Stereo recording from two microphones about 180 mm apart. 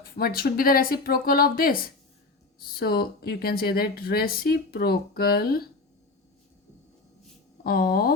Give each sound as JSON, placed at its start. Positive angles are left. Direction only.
{"t": 0.0, "sound": "speech", "side_deg": 55}
{"t": 7.6, "sound": "speech", "side_deg": 55}